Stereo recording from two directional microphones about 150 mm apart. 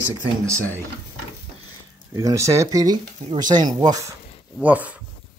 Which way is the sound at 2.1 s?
20° right (ahead or behind).